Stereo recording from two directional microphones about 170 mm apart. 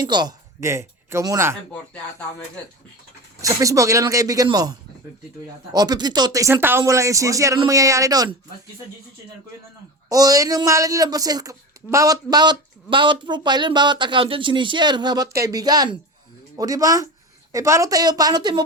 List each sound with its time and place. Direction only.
0.0 s speech: 25° right (ahead or behind)
3.4 s speech: 20° right (ahead or behind)
10.1 s speech: 20° right (ahead or behind)